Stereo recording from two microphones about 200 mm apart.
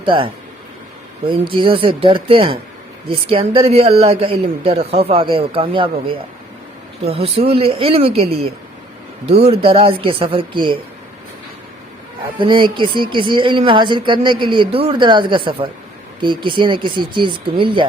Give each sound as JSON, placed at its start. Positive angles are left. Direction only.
{"t": 0.0, "sound": "a woman's voice", "side_deg": -25}
{"t": 12.4, "sound": "a woman's voice", "side_deg": -25}